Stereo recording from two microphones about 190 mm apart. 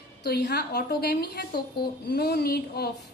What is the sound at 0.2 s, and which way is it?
A woman's voice, 60° left (ahead or behind).